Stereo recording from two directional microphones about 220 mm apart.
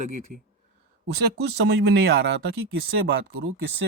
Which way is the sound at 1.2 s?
50° right (ahead or behind).